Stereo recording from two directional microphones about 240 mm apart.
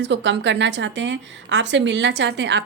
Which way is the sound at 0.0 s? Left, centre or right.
Right.